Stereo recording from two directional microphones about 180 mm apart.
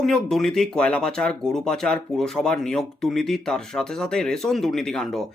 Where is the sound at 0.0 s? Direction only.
Centre (ahead or behind).